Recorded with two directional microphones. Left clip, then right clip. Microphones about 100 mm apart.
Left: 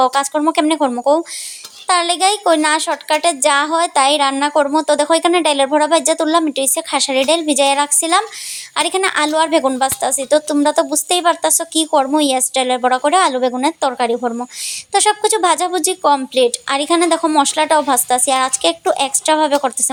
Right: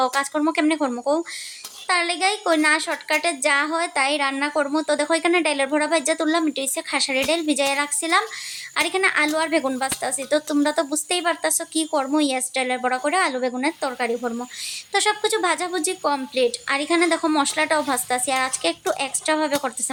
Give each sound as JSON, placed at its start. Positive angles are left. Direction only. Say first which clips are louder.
{"t": 0.0, "sound": "a woman's voice", "louder": "left 7 dB", "side_deg": 35}